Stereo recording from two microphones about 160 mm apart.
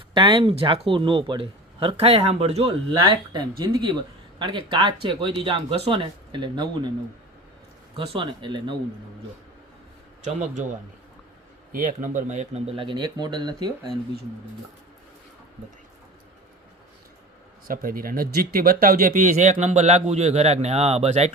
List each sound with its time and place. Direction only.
0.1 s speech: 30° right (ahead or behind)
3.6 s speech: 25° right (ahead or behind)
7.9 s speech: 35° right (ahead or behind)
10.2 s speech: 45° right (ahead or behind)
11.7 s speech: 60° right (ahead or behind); by 13.9 s 25° right (ahead or behind)
17.7 s speech: 65° right (ahead or behind); by 21.3 s 45° right (ahead or behind)